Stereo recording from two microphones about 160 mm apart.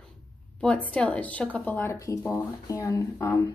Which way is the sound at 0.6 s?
5° left (ahead or behind).